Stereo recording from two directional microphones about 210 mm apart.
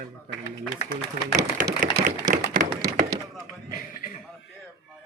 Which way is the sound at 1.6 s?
40° right (ahead or behind).